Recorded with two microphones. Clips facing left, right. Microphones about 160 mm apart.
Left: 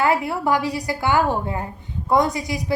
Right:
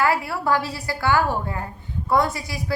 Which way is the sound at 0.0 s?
20° left (ahead or behind).